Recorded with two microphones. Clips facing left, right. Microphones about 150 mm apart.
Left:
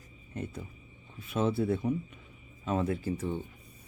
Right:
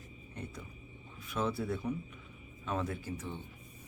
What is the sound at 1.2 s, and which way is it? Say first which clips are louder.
A man's voice: left 6 dB; 30° left (ahead or behind).